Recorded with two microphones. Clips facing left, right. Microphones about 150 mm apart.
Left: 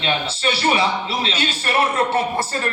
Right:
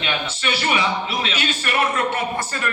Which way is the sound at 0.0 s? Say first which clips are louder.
Left 3 dB; 30° left (ahead or behind).